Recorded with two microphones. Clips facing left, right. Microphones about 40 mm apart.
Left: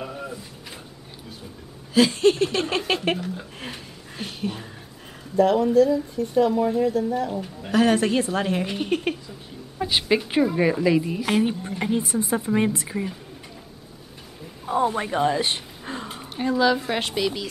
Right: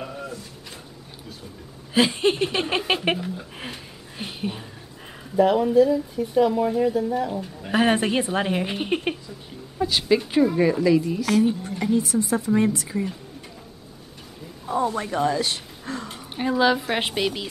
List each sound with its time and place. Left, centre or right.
0.0 s a sound: centre
2.0 s a woman's voice: right
2.8 s speech: centre
3.5 s a sound: centre
5.3 s speech: centre
7.7 s a woman's voice: right
9.8 s a woman's voice: centre
14.7 s speech: left
16.3 s speech: centre
17.0 s a woman's voice: centre